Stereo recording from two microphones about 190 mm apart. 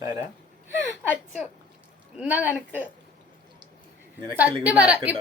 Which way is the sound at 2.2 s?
10° right (ahead or behind).